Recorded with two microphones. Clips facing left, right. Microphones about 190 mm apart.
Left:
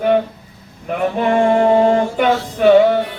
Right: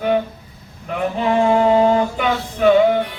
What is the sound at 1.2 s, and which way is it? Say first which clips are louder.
Mantra: left 2 dB; 50° left (ahead or behind).